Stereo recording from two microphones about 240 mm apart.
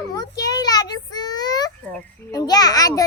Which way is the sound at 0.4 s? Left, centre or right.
Centre.